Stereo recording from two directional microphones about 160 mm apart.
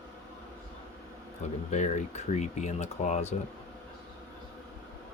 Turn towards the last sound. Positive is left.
turn(degrees=45)  # may be behind; listen again after turning